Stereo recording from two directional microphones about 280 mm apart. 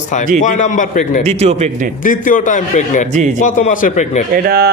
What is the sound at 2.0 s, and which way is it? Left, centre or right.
A man's voice, left.